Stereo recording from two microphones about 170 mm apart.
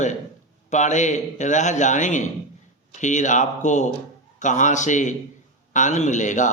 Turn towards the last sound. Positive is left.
turn(degrees=45)  # may be behind; listen again after turning